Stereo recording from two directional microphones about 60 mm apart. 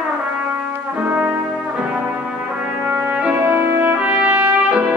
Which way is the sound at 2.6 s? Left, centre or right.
Right.